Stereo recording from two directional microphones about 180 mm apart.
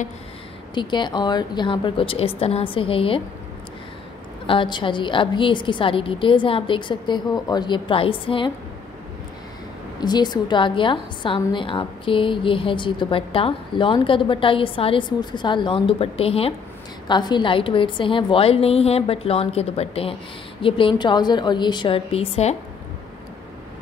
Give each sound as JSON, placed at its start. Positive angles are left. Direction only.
{"t": 0.7, "sound": "a woman's voice", "side_deg": 25}
{"t": 4.5, "sound": "a woman's voice", "side_deg": 25}
{"t": 9.9, "sound": "a woman's voice", "side_deg": 25}